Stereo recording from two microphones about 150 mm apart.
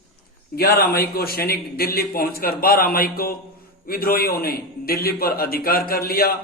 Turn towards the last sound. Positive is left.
turn(degrees=85)